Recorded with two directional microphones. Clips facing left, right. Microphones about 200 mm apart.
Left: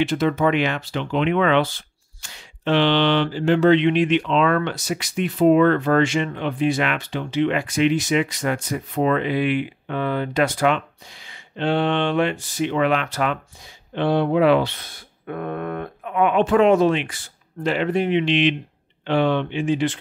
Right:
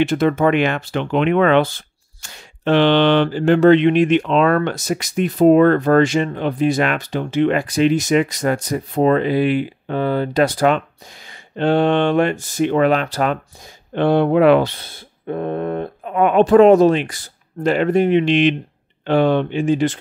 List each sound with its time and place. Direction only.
0.0 s speech: 50° right (ahead or behind)
13.9 s speech: 50° right (ahead or behind)
14.7 s speech: 30° right (ahead or behind)
16.3 s speech: 40° right (ahead or behind)